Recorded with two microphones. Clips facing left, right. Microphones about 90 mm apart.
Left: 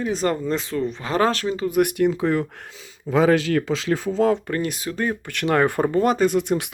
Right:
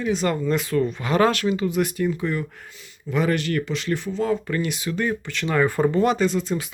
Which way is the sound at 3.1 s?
45° left (ahead or behind).